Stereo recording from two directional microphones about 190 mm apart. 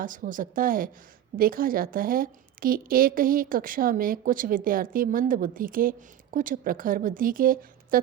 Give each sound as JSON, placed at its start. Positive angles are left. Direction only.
{"t": 0.0, "sound": "a woman's voice", "side_deg": -45}